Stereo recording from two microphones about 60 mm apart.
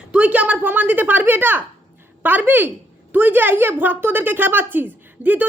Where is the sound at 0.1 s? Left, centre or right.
Right.